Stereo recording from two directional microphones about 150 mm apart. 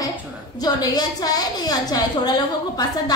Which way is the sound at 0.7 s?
25° left (ahead or behind).